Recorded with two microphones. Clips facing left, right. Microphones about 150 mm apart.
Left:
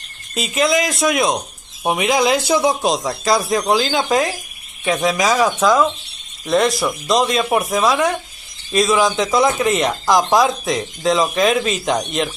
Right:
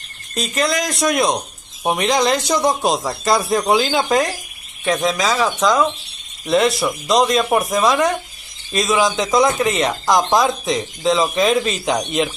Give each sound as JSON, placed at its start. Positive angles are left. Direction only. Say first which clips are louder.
{"t": 0.3, "sound": "speech", "louder": "left 3 dB", "side_deg": 5}